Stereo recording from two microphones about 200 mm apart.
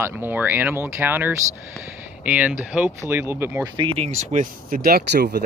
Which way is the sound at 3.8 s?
25° right (ahead or behind).